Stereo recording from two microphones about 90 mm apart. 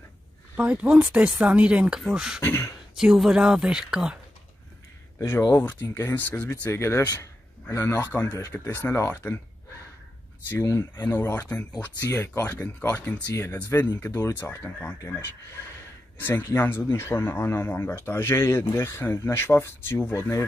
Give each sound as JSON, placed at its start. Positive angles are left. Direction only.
{"t": 0.6, "sound": "speech", "side_deg": -15}
{"t": 2.4, "sound": "speech", "side_deg": 25}
{"t": 3.0, "sound": "speech", "side_deg": -5}
{"t": 5.6, "sound": "speech", "side_deg": 20}
{"t": 10.5, "sound": "speech", "side_deg": 30}
{"t": 16.2, "sound": "speech", "side_deg": 25}